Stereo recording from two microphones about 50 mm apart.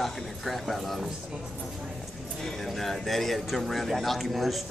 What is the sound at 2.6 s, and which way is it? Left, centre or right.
A man's voice, centre.